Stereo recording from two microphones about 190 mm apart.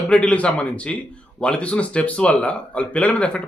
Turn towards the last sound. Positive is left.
turn(degrees=5)  # may be behind; listen again after turning